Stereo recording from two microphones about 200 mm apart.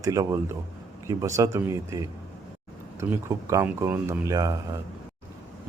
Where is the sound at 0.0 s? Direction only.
15° right (ahead or behind).